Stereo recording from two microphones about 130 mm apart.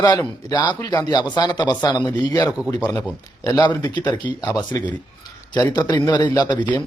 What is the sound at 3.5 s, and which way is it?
A man's voice, 30° left (ahead or behind).